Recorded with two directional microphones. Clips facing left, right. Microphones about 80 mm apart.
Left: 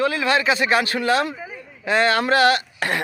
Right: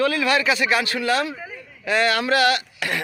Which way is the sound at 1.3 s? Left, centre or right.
Centre.